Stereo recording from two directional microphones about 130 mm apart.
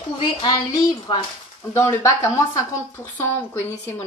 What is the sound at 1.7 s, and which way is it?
A woman's voice, 20° left (ahead or behind).